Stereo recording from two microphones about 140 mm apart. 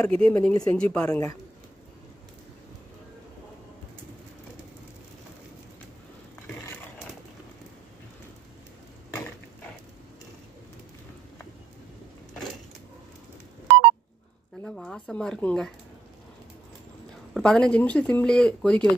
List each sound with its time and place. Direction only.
0.0 s speech: 5° left (ahead or behind)
9.1 s mechanisms: 15° left (ahead or behind)
14.6 s a sound: 5° left (ahead or behind)
17.3 s speech: 5° left (ahead or behind)